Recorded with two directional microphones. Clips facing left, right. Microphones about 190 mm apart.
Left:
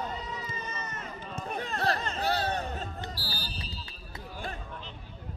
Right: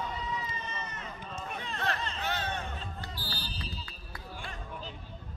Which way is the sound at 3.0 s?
40° left (ahead or behind).